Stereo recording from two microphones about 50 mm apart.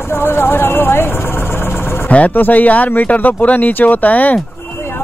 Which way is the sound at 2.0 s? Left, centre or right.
Left.